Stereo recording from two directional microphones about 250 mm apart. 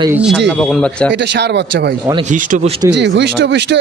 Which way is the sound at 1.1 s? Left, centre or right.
Right.